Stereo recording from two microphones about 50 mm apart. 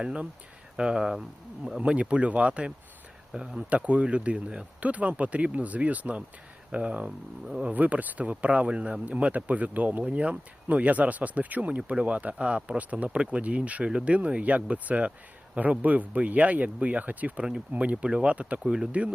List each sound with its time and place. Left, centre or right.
0.0 s speech: right
3.7 s speech: right